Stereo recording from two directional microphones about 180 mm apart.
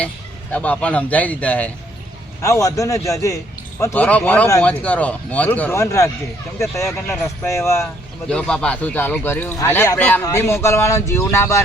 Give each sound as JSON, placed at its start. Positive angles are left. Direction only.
{"t": 0.5, "sound": "speech", "side_deg": 5}
{"t": 8.3, "sound": "speech", "side_deg": 5}